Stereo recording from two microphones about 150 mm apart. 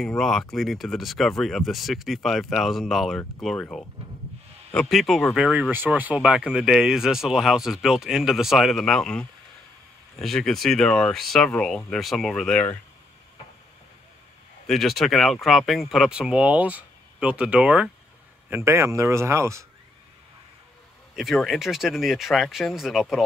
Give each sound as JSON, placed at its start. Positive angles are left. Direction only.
{"t": 0.0, "sound": "speech", "side_deg": 0}
{"t": 4.8, "sound": "speech", "side_deg": 0}
{"t": 14.7, "sound": "speech", "side_deg": 0}
{"t": 21.2, "sound": "speech", "side_deg": 0}